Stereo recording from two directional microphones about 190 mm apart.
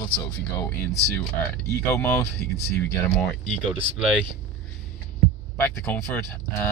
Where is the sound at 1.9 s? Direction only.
15° left (ahead or behind).